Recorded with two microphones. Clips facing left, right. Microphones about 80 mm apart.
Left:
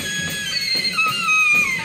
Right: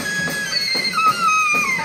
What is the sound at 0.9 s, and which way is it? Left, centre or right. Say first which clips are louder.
Music: right 6 dB; centre.